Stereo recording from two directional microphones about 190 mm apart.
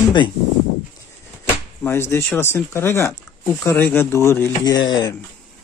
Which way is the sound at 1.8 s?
15° left (ahead or behind).